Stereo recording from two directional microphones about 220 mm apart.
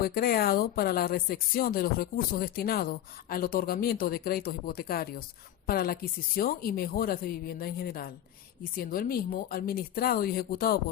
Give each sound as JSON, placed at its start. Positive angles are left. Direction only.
{"t": 0.0, "sound": "a woman's voice", "side_deg": 45}